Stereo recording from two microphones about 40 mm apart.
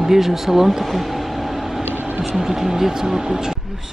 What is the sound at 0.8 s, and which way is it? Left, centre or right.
Vehicle, centre.